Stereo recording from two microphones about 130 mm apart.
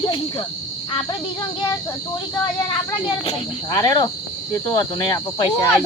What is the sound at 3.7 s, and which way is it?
Cricket, 35° left (ahead or behind).